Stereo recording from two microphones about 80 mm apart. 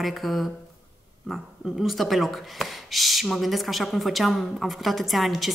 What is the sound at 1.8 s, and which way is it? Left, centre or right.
A woman's voice, centre.